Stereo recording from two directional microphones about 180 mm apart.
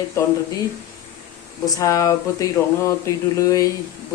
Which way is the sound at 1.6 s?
20° left (ahead or behind).